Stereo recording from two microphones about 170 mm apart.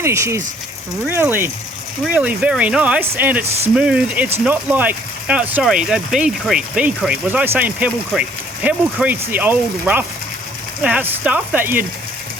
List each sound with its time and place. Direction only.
0.0 s speech: 15° right (ahead or behind)